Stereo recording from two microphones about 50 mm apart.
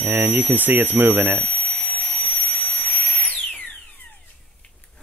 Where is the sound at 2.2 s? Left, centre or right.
Left.